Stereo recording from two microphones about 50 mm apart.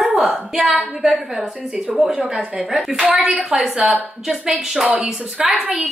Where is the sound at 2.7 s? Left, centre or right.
Centre.